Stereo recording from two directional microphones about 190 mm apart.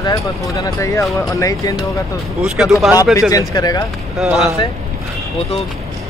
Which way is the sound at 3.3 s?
20° left (ahead or behind).